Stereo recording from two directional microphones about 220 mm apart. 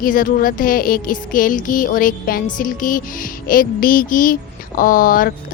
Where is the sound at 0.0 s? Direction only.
40° left (ahead or behind).